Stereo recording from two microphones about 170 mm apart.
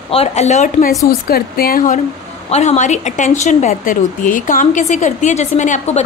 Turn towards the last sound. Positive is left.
turn(degrees=45)  # may be behind; listen again after turning